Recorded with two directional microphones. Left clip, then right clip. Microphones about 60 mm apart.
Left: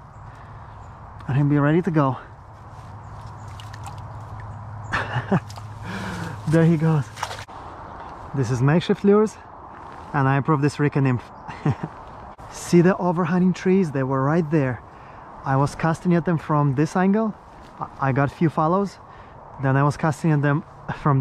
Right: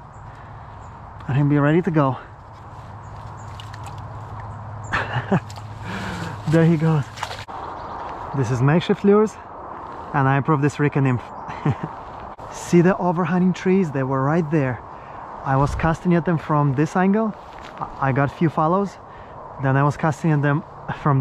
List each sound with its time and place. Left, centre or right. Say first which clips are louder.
1.2 s speech: right 2 dB; centre
4.9 s a sound: right 2 dB; centre
8.1 s speech: right 1 dB; centre